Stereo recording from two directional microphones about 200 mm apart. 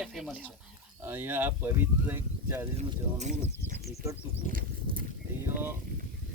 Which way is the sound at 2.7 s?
35° right (ahead or behind).